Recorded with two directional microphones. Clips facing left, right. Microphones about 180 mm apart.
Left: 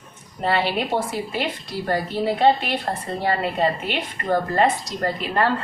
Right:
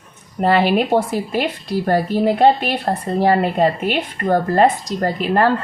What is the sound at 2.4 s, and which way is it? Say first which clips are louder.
A woman's voice: right 4 dB; 40° right (ahead or behind).